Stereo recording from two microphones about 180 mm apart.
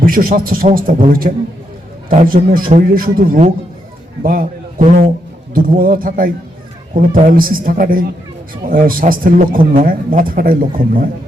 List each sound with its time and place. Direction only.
0.0 s a man's voice: 50° right (ahead or behind)
5.5 s a man's voice: 55° right (ahead or behind)